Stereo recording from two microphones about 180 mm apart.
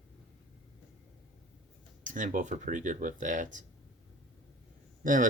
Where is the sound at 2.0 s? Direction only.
45° right (ahead or behind).